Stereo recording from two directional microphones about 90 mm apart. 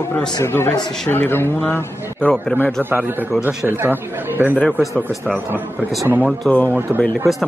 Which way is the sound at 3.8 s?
25° right (ahead or behind).